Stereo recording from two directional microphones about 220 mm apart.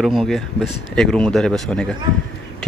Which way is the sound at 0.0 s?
Centre (ahead or behind).